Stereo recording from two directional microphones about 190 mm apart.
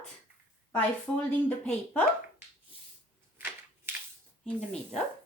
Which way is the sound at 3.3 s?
10° right (ahead or behind).